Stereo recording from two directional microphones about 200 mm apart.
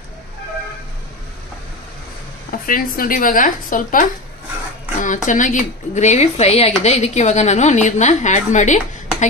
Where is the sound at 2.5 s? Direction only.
45° left (ahead or behind).